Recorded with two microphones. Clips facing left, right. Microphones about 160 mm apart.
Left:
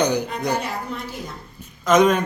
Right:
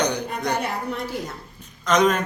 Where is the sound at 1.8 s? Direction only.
5° left (ahead or behind).